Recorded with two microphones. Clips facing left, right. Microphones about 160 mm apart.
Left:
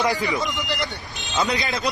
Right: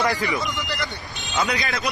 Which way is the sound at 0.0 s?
20° left (ahead or behind).